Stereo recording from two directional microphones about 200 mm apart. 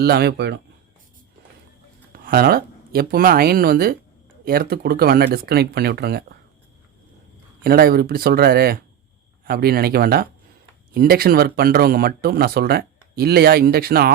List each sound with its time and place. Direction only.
0.0 s speech: 50° right (ahead or behind)
2.2 s speech: 50° right (ahead or behind)
7.6 s speech: 50° right (ahead or behind)